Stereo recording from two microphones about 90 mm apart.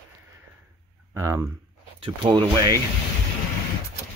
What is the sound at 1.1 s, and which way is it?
Speech, 35° right (ahead or behind).